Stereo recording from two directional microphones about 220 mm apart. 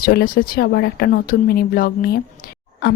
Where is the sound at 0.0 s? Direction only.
45° left (ahead or behind).